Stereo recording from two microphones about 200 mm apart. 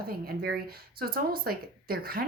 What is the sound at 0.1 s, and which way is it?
Speech, 50° right (ahead or behind).